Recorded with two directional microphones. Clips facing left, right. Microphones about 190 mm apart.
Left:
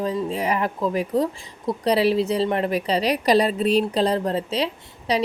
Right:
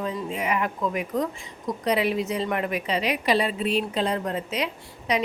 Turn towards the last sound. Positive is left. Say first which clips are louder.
# left 2 dB
turn(degrees=30)  # may be behind; listen again after turning